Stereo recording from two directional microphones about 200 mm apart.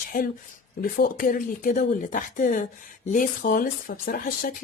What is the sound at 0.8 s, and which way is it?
A woman's voice, 45° left (ahead or behind).